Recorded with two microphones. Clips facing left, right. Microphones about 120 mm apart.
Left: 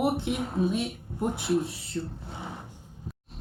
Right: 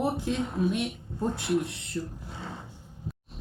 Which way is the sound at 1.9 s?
25° left (ahead or behind).